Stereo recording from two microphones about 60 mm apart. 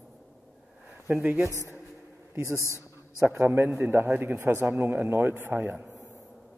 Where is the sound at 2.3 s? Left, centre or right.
Right.